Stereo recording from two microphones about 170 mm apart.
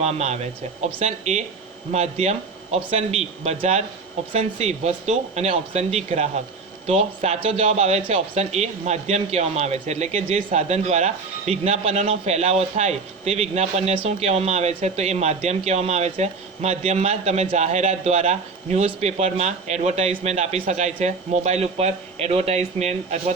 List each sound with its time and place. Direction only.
0.0 s speech: 40° right (ahead or behind)